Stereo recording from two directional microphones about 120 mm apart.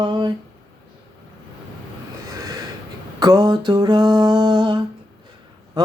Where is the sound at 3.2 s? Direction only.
35° right (ahead or behind).